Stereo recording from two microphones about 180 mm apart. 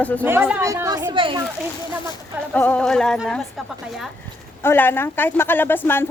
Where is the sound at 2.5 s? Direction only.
5° left (ahead or behind).